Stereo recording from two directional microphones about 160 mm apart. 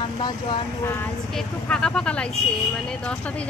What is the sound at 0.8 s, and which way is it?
Speech, 15° left (ahead or behind).